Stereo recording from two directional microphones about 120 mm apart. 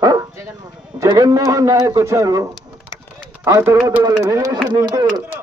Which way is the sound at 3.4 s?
25° right (ahead or behind).